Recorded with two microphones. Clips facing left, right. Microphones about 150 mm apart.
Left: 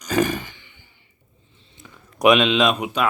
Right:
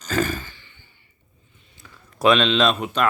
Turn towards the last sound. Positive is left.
turn(degrees=10)  # may be behind; listen again after turning